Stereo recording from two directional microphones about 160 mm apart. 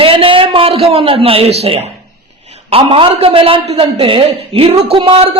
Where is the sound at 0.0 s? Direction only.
35° right (ahead or behind).